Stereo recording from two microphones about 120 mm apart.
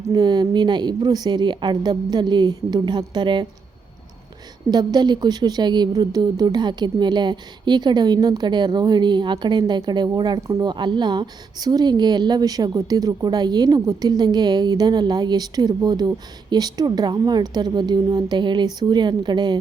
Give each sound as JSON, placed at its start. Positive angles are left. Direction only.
{"t": 0.1, "sound": "a woman's voice", "side_deg": -35}
{"t": 4.7, "sound": "a woman's voice", "side_deg": -35}